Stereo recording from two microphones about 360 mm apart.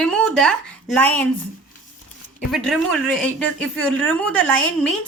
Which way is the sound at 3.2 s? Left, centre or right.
Centre.